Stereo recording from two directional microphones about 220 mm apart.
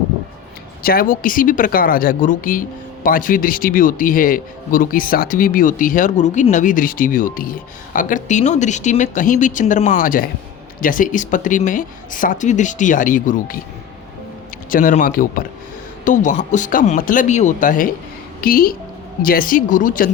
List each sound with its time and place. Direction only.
0.8 s speech: 40° left (ahead or behind)
14.7 s speech: 35° left (ahead or behind)